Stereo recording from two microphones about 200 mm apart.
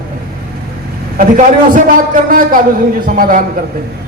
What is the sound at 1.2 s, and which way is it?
A man's voice, 40° right (ahead or behind).